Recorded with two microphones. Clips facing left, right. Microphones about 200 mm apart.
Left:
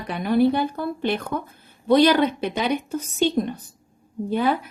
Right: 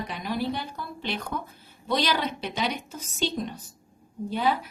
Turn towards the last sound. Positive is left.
turn(degrees=55)  # may be behind; listen again after turning